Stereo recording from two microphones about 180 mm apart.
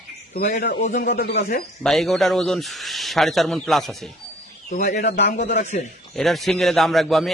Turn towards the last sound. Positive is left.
turn(degrees=0)  # may be behind; listen again after turning